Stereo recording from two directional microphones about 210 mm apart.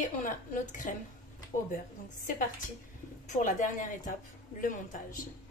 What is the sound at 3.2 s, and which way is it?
A woman's voice, 35° left (ahead or behind).